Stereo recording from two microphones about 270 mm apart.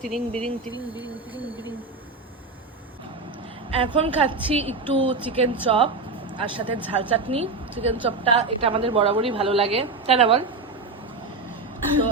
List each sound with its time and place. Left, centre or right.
0.1 s speech: centre
0.7 s speech: centre
3.7 s a woman's voice: centre